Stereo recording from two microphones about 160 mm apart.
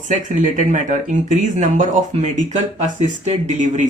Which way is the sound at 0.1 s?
55° right (ahead or behind).